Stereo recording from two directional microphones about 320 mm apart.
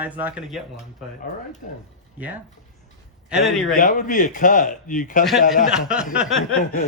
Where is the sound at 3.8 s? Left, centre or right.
Left.